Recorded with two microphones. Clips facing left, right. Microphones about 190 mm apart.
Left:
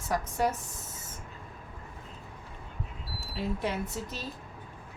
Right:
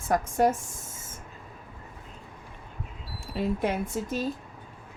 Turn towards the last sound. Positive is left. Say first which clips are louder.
# right 6 dB
turn(degrees=-50)  # may be behind; listen again after turning